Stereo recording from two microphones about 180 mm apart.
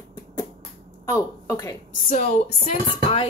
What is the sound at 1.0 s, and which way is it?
Speech, 20° left (ahead or behind).